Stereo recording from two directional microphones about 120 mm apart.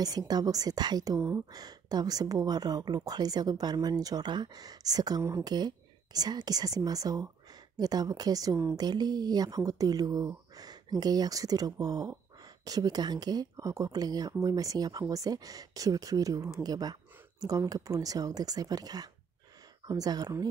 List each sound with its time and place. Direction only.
0.0 s speech: 35° right (ahead or behind)
8.7 s speech: 35° right (ahead or behind)